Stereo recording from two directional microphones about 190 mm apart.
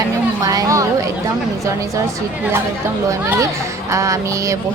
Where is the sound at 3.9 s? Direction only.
15° right (ahead or behind).